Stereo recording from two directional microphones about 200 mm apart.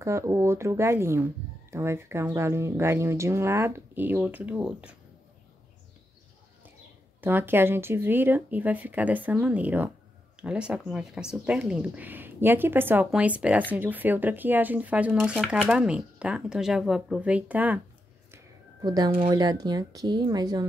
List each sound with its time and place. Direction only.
0.0 s speech: 15° right (ahead or behind)
7.2 s speech: 10° right (ahead or behind)
18.3 s a woman's voice: 20° right (ahead or behind)